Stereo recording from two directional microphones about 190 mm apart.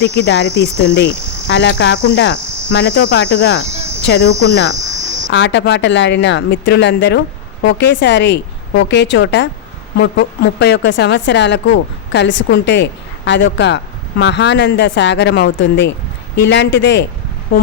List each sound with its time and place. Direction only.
0.2 s cricket: 65° left (ahead or behind)
4.7 s cricket: 40° right (ahead or behind)
5.3 s a woman's voice: 70° left (ahead or behind)